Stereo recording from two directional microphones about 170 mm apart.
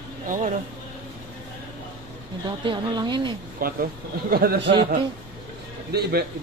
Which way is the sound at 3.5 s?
60° right (ahead or behind).